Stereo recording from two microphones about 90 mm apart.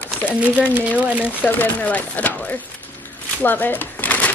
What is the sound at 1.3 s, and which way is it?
Speech, 20° left (ahead or behind).